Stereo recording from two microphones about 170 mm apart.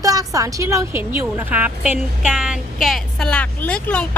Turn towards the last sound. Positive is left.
turn(degrees=5)  # may be behind; listen again after turning